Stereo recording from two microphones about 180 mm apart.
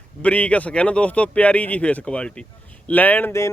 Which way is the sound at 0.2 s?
5° left (ahead or behind).